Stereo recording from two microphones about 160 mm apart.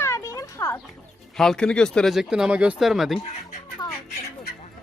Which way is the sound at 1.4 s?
5° left (ahead or behind).